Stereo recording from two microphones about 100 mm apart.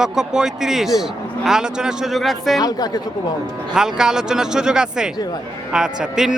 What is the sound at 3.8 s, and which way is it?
Speech, 5° right (ahead or behind).